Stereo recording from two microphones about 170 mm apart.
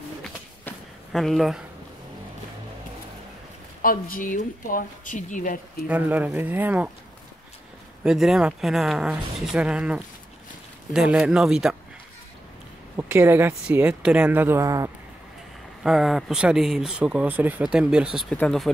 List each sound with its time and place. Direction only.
0.2 s a sound: centre (ahead or behind)
3.8 s speech: 55° left (ahead or behind)
5.9 s speech: 10° right (ahead or behind)
8.0 s speech: centre (ahead or behind)
12.9 s speech: 15° right (ahead or behind)
15.8 s speech: centre (ahead or behind)